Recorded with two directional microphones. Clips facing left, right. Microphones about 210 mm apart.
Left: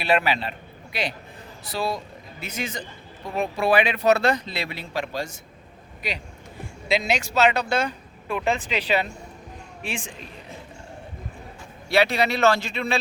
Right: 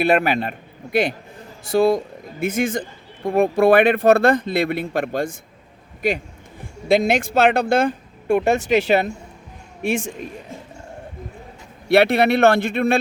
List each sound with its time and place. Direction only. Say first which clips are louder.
0.0 s a man's voice: right 5 dB; 50° right (ahead or behind)
11.9 s speech: right 6 dB; 55° right (ahead or behind)